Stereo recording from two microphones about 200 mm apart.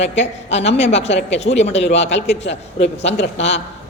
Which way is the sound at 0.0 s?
35° left (ahead or behind).